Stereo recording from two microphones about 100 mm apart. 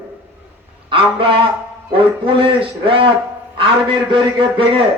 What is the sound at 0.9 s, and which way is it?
Speech, 60° right (ahead or behind).